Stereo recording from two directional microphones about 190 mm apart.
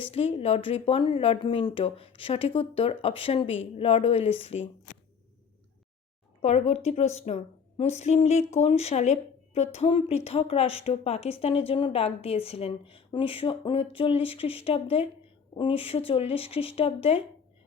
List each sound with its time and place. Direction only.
0.0 s speech: 30° left (ahead or behind)
6.4 s speech: 35° left (ahead or behind)